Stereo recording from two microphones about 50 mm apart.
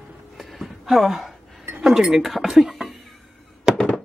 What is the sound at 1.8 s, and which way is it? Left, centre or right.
Speech, centre.